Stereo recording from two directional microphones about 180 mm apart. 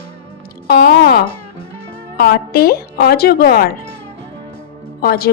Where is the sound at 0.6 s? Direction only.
65° left (ahead or behind).